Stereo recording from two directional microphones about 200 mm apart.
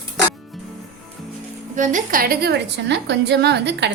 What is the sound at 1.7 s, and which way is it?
A woman's voice, 40° right (ahead or behind).